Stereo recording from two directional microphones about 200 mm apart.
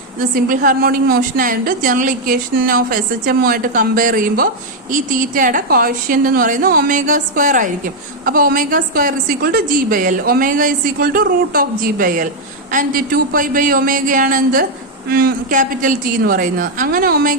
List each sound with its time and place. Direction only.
0.2 s a woman's voice: 45° right (ahead or behind)